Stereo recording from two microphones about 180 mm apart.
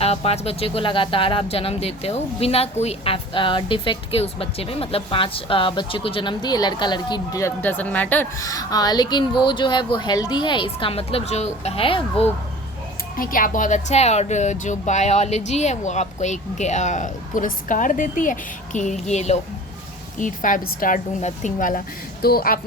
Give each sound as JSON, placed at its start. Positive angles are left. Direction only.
{"t": 0.0, "sound": "speech", "side_deg": 35}
{"t": 13.1, "sound": "a woman's voice", "side_deg": 50}